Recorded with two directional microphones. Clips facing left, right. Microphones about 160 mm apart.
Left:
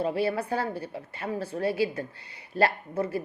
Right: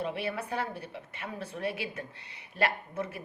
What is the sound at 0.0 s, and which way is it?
A woman's voice, 30° left (ahead or behind).